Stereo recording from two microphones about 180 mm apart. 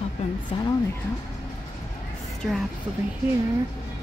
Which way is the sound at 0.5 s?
30° left (ahead or behind).